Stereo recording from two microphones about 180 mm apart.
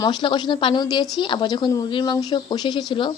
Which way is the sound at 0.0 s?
25° left (ahead or behind).